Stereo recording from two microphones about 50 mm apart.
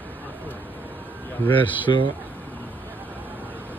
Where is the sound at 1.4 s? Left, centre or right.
Left.